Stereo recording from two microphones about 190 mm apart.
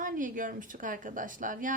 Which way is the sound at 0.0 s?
45° right (ahead or behind).